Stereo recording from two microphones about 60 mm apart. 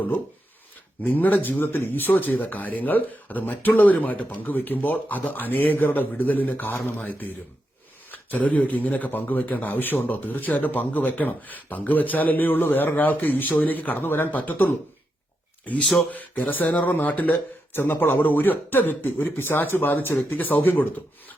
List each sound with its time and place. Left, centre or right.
1.0 s speech: left